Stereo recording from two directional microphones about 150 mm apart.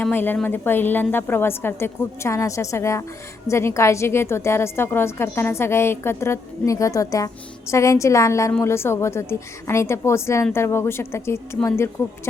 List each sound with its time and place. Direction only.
0.0 s a woman's voice: 15° left (ahead or behind)